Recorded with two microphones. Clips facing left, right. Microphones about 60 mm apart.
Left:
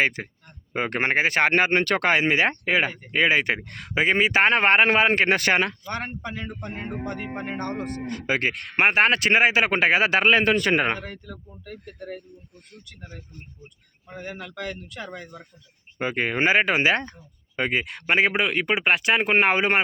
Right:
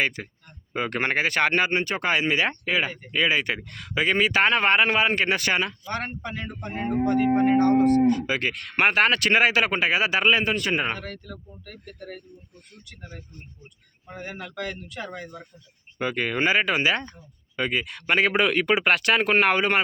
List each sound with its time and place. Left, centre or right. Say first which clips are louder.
0.0 s a man's voice: left 3 dB; left
1.7 s speech: left 4 dB; left
2.0 s a man's voice: left 1 dB; left
4.0 s a man's voice: left 1 dB; left
5.9 s speech: even; centre
6.6 s speech: right 4 dB; centre
6.9 s speech: right 14 dB; centre
8.1 s a man's voice: even; left
8.7 s speech: left 1 dB; left
9.6 s speech: left 3 dB; left
11.0 s speech: even; centre
14.1 s speech: even; centre
16.0 s a man's voice: left 1 dB; left